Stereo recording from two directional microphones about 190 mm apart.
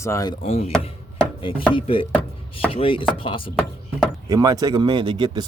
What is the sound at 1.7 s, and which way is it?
Speech, 30° left (ahead or behind).